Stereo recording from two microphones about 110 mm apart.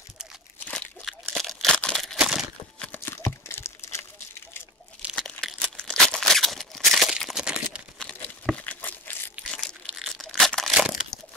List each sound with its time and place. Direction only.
0.7 s crumpling: 5° left (ahead or behind)
2.9 s a sound: 20° left (ahead or behind)
5.1 s tearing: centre (ahead or behind)
8.0 s crumpling: 10° left (ahead or behind)
9.5 s crushing: 5° left (ahead or behind)
9.8 s tearing: centre (ahead or behind)